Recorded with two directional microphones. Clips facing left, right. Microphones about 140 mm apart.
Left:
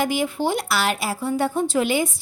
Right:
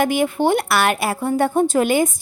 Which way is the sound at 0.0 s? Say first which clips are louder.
Right 5 dB; 55° right (ahead or behind).